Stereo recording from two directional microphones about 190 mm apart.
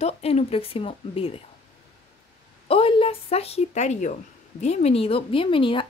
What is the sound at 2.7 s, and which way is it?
A woman's voice, 30° left (ahead or behind).